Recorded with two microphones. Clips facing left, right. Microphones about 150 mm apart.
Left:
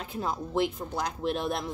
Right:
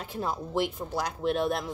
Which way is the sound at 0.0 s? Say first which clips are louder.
Even; centre (ahead or behind).